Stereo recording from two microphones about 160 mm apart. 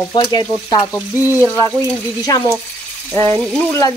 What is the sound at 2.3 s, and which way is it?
Speech, 20° left (ahead or behind).